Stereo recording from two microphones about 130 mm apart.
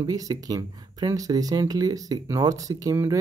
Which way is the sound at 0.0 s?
30° right (ahead or behind).